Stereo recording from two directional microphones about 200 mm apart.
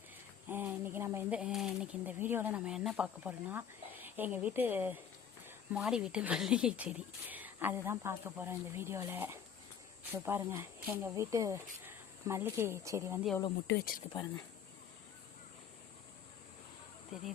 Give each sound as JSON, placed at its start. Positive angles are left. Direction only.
{"t": 0.4, "sound": "speech", "side_deg": -10}
{"t": 13.7, "sound": "speech", "side_deg": 50}
{"t": 14.1, "sound": "speech", "side_deg": 20}